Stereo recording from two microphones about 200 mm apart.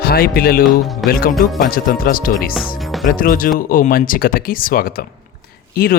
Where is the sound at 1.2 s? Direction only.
45° left (ahead or behind).